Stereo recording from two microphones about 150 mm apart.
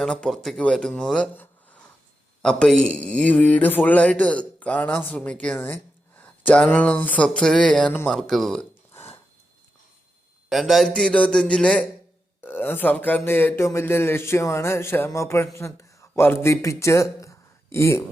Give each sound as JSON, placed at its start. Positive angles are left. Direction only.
{"t": 0.0, "sound": "a man's voice", "side_deg": 5}
{"t": 8.9, "sound": "a sound", "side_deg": 15}
{"t": 10.5, "sound": "a man's voice", "side_deg": 0}